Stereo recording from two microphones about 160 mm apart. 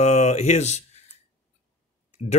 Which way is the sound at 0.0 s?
45° left (ahead or behind).